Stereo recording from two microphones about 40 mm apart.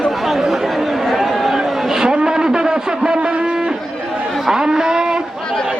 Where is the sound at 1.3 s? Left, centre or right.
Centre.